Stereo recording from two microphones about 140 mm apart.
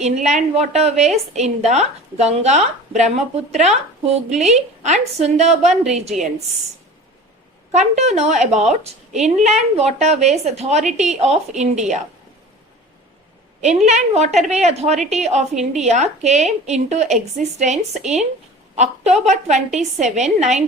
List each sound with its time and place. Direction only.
0.0 s a woman's voice: 55° right (ahead or behind)
7.7 s a woman's voice: 55° right (ahead or behind)
13.6 s a woman's voice: 55° right (ahead or behind)